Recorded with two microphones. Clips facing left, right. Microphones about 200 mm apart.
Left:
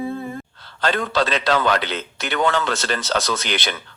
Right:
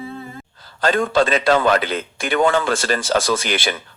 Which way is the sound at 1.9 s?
50° right (ahead or behind).